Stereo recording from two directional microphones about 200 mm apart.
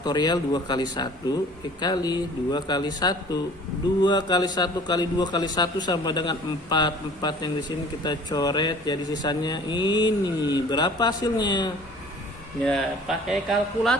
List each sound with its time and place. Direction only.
0.0 s speech: 20° left (ahead or behind)
12.6 s speech: centre (ahead or behind)